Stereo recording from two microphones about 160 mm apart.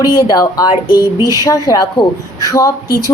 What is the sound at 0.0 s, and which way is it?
A woman's voice, 25° left (ahead or behind).